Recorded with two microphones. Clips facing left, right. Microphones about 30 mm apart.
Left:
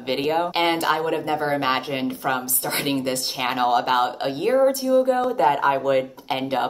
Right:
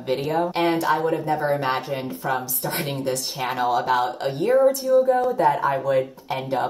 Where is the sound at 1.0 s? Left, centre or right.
Left.